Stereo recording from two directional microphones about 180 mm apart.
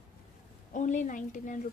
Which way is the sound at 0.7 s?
45° left (ahead or behind).